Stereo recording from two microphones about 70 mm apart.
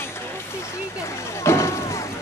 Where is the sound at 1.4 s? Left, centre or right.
Left.